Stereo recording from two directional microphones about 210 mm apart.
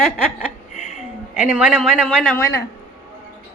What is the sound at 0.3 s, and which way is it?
Chuckle, 35° left (ahead or behind).